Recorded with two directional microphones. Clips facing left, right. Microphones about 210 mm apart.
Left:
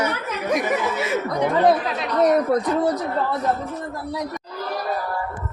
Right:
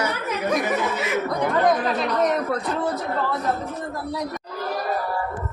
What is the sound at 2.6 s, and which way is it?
Speech, 35° left (ahead or behind).